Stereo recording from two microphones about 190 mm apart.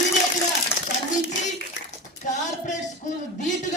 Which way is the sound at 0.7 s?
10° left (ahead or behind).